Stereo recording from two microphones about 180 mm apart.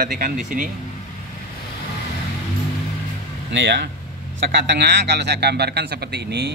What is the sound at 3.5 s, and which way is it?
A man's voice, 70° right (ahead or behind).